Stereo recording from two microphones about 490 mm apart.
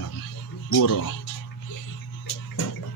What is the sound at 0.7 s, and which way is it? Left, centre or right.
Speech, left.